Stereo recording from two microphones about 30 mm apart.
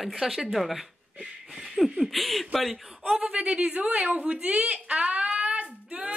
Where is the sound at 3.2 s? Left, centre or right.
Right.